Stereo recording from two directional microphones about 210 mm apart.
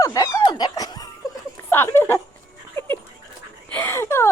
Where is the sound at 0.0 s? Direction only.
15° left (ahead or behind).